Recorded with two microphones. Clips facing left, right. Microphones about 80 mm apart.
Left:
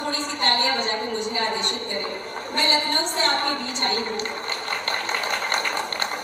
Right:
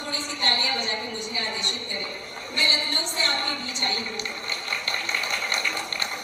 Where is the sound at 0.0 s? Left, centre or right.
Left.